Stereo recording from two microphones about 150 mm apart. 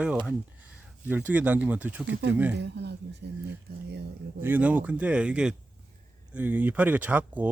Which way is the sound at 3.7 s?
90° right.